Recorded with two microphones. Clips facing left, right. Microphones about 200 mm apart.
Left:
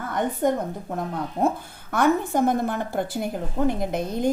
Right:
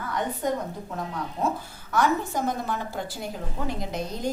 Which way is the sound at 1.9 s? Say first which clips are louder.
Left 4 dB; 55° left (ahead or behind).